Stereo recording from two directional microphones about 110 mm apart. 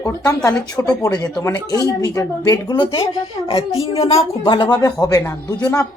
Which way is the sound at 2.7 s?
50° left (ahead or behind).